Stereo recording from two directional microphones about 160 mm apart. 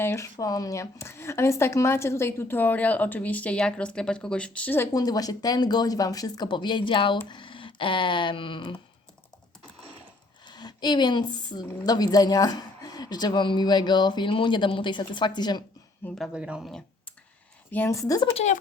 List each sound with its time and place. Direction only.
0.0 s speech: 15° left (ahead or behind)
4.9 s a woman's voice: 25° left (ahead or behind)
10.4 s a woman's voice: 25° left (ahead or behind)
16.0 s speech: centre (ahead or behind)
17.7 s a woman's voice: 15° left (ahead or behind)